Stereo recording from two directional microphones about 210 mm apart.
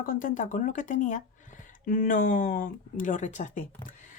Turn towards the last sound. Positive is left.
turn(degrees=40)  # may be behind; listen again after turning